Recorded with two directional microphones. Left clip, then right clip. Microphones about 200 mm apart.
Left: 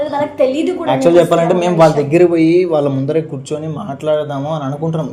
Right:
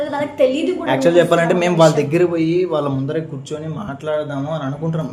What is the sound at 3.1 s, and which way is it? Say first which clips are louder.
Speech: left 6 dB; 25° left (ahead or behind).